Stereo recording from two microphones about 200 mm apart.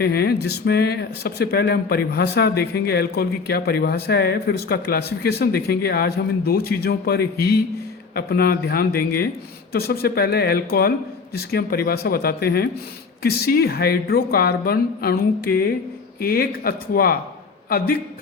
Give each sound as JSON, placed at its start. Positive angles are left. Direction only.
{"t": 0.0, "sound": "a man's voice", "side_deg": 50}